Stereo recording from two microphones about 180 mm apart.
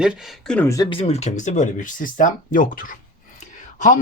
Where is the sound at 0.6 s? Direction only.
15° left (ahead or behind).